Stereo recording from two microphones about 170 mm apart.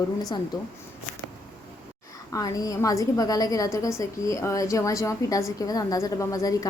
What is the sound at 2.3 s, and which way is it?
A woman's voice, 20° left (ahead or behind).